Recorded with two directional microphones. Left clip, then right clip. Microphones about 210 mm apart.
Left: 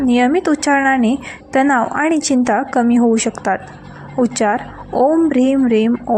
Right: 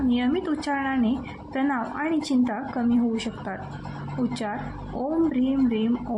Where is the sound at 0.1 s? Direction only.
40° left (ahead or behind).